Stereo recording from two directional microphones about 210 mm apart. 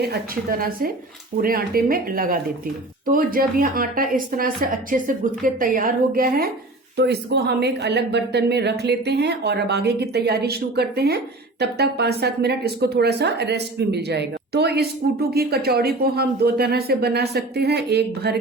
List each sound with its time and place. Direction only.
0.0 s a woman's voice: 45° right (ahead or behind)